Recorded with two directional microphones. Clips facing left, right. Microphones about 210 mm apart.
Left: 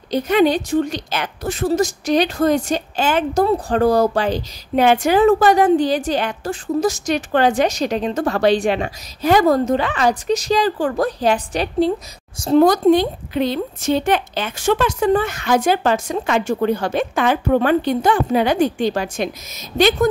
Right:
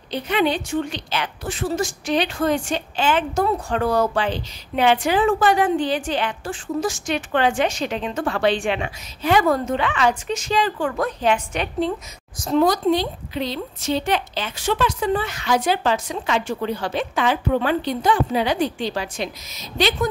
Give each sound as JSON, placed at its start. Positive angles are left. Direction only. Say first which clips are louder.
{"t": 0.1, "sound": "a woman's voice", "louder": "left 6 dB", "side_deg": 40}
{"t": 12.6, "sound": "a woman's voice", "louder": "left 6 dB", "side_deg": 50}